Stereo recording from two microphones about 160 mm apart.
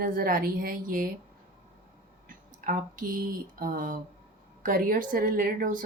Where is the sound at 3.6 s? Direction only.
55° right (ahead or behind).